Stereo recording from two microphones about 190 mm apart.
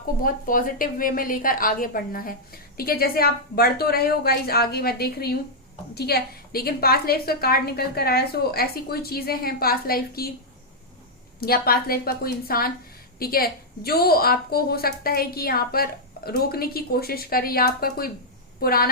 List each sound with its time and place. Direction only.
0.2 s a woman's voice: 45° left (ahead or behind)
11.3 s a woman's voice: 55° left (ahead or behind)